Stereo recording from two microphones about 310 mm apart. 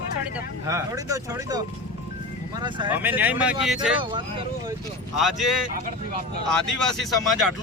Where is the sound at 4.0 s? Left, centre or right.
Centre.